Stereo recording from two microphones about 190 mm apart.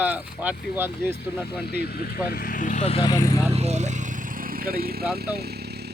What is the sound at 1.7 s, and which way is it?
Speech, 55° left (ahead or behind).